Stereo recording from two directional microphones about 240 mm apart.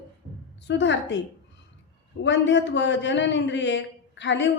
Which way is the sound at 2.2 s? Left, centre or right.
Left.